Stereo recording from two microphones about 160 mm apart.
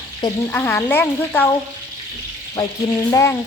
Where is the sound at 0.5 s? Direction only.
15° left (ahead or behind).